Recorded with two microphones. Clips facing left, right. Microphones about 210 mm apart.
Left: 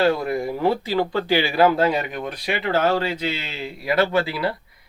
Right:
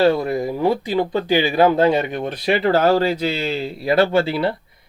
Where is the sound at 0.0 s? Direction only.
25° right (ahead or behind).